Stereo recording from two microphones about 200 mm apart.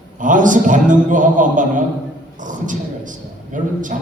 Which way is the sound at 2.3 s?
40° right (ahead or behind).